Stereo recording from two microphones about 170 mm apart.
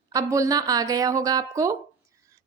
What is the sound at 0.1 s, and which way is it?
A woman's voice, 20° right (ahead or behind).